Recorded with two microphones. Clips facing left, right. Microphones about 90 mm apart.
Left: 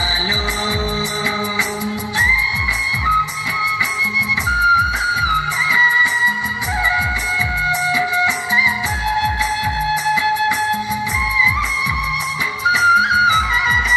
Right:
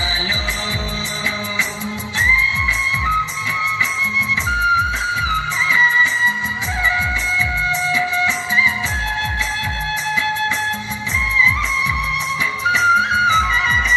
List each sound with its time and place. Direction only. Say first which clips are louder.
5.3 s music: left 1 dB; 15° left (ahead or behind)
7.9 s music: left 1 dB; 15° left (ahead or behind)
12.8 s music: left 2 dB; 10° left (ahead or behind)